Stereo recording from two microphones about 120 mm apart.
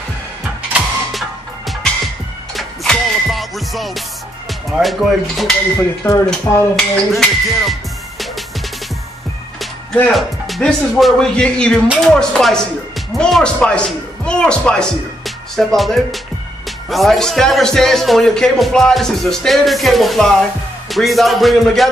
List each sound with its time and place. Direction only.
2.5 s music: centre (ahead or behind)
4.5 s speech: centre (ahead or behind)
5.8 s speech: 25° left (ahead or behind)
6.8 s speech: 5° left (ahead or behind)
10.1 s speech: centre (ahead or behind)